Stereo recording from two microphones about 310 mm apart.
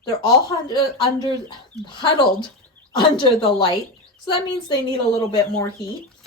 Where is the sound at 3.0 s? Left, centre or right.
Centre.